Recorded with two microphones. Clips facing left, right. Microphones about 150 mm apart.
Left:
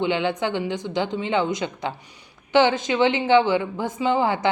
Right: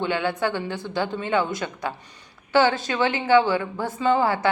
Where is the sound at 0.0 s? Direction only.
20° left (ahead or behind).